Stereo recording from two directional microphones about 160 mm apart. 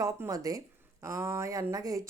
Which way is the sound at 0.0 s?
20° right (ahead or behind).